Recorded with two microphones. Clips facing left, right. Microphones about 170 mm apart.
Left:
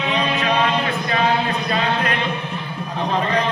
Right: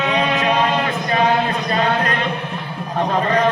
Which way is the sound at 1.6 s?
45° right (ahead or behind).